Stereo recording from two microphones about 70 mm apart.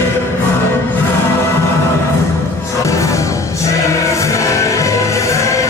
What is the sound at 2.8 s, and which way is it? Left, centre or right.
Music, left.